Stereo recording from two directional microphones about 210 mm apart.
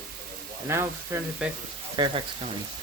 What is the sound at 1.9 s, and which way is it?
Speech, 20° right (ahead or behind).